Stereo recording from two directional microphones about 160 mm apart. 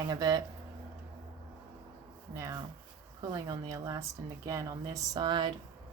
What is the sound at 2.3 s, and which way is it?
Speech, 20° right (ahead or behind).